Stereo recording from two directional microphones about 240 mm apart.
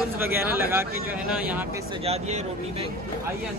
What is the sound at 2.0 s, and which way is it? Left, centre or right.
Speech, right.